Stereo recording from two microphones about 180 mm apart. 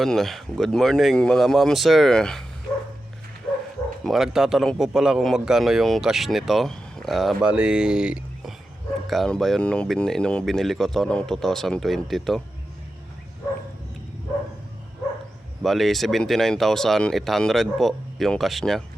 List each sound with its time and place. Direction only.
0.0 s a man's voice: centre (ahead or behind)
4.0 s a man's voice: centre (ahead or behind)
15.6 s a man's voice: centre (ahead or behind)